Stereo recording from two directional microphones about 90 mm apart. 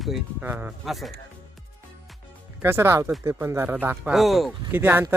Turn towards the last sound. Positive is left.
turn(degrees=-25)  # may be behind; listen again after turning